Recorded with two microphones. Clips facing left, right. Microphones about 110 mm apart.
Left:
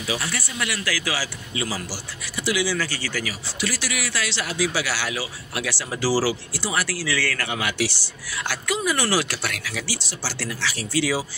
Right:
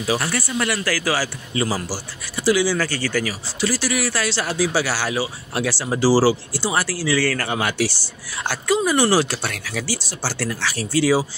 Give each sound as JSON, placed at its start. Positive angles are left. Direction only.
{"t": 0.0, "sound": "speech", "side_deg": -45}
{"t": 3.6, "sound": "speech", "side_deg": -35}